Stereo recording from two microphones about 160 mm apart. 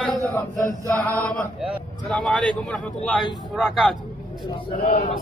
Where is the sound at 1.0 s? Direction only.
10° left (ahead or behind).